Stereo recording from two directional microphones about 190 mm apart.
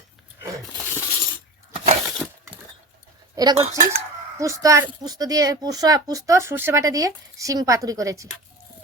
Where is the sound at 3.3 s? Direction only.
20° right (ahead or behind).